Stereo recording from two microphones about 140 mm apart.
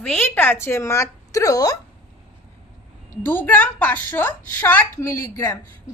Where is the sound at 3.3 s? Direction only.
15° left (ahead or behind).